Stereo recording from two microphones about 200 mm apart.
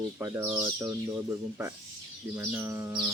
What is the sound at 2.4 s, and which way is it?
Speech, 10° right (ahead or behind).